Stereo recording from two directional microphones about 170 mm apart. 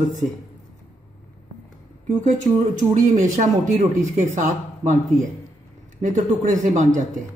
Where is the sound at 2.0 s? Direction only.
45° right (ahead or behind).